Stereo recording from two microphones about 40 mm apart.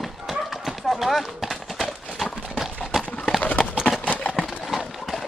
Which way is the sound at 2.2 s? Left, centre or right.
Centre.